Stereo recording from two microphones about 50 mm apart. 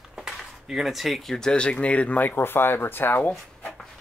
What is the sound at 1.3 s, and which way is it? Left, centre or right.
Speech, centre.